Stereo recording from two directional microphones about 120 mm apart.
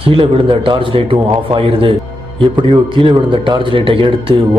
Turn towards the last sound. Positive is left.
turn(degrees=-45)  # may be behind; listen again after turning